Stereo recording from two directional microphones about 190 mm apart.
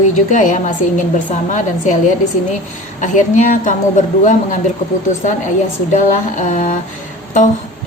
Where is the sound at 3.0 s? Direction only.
40° left (ahead or behind).